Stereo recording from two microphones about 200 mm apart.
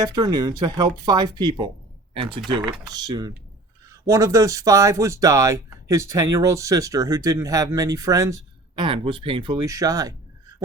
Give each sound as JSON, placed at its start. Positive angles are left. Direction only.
{"t": 0.0, "sound": "speech", "side_deg": -20}